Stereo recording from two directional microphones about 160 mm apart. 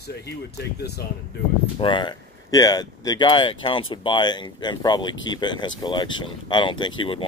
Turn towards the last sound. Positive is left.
turn(degrees=30)  # may be behind; listen again after turning